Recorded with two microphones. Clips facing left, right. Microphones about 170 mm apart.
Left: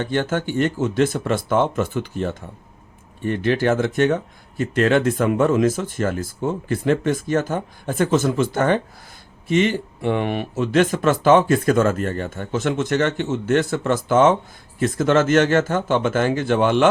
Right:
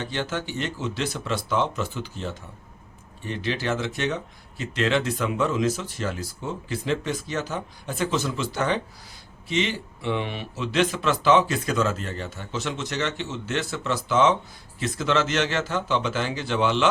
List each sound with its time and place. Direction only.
0.0 s speech: 50° left (ahead or behind)